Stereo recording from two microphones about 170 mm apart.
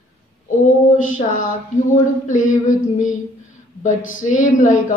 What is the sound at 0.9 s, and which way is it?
Speech, 50° left (ahead or behind).